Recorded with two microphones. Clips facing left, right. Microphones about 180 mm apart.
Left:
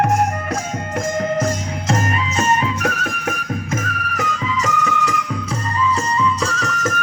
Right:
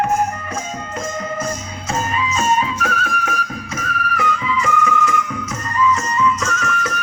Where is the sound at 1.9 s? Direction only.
70° left (ahead or behind).